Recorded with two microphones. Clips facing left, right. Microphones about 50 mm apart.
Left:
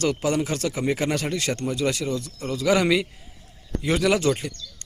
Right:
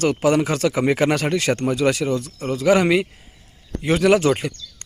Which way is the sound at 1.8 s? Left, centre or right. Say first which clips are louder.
Right 4 dB; right.